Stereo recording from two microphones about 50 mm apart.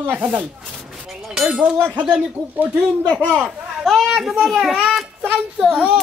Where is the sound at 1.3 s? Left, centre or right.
Centre.